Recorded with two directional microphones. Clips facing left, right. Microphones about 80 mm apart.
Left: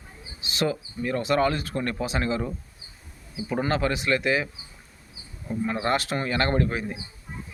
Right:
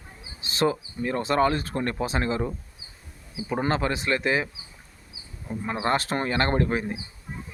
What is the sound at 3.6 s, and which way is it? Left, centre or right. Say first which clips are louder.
Speech: even; right.